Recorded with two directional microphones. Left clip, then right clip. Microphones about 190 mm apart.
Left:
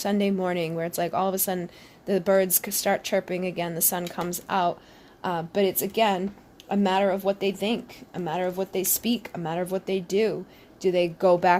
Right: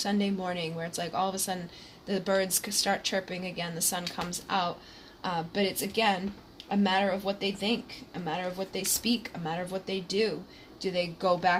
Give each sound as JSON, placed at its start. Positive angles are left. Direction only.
{"t": 0.0, "sound": "speech", "side_deg": 60}